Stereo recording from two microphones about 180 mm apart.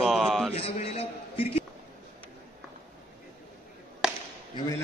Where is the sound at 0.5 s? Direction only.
35° left (ahead or behind).